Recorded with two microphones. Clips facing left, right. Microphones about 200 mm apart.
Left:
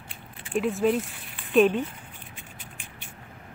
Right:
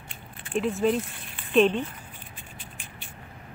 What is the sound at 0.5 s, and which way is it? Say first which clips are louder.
Speech: left 1 dB; centre (ahead or behind).